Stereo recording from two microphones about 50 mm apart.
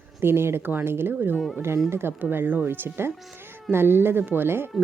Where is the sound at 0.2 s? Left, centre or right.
Right.